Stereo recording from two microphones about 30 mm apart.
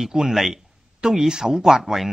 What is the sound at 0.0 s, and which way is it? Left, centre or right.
Speech, centre.